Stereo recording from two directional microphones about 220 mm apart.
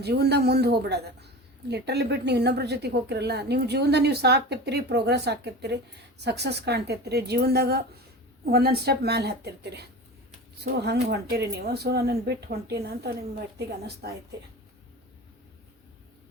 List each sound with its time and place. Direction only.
0.0 s speech: 50° right (ahead or behind)